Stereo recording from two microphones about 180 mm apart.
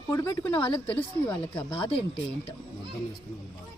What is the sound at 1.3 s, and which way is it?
Speech, 10° left (ahead or behind).